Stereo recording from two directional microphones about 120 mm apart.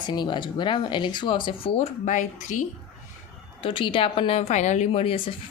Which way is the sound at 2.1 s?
90° left.